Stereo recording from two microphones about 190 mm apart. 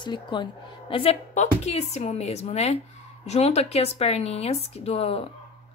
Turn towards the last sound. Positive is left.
turn(degrees=30)  # may be behind; listen again after turning